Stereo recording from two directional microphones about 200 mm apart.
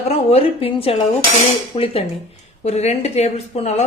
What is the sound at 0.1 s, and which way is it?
A woman's voice, 30° left (ahead or behind).